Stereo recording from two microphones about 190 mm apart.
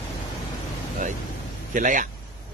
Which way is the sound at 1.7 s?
45° right (ahead or behind).